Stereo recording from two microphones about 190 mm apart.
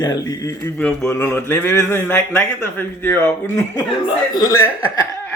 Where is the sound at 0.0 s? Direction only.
20° left (ahead or behind).